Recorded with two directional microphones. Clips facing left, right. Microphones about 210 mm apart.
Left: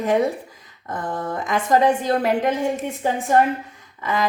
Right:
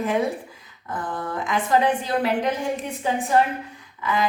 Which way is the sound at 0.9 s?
40° left (ahead or behind).